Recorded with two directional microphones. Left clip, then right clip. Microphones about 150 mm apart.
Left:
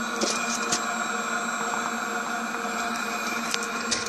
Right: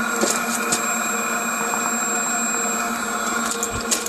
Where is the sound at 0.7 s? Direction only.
10° right (ahead or behind); by 3.5 s 5° left (ahead or behind).